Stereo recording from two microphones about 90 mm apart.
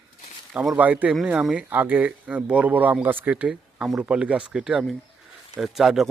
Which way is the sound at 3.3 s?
10° right (ahead or behind).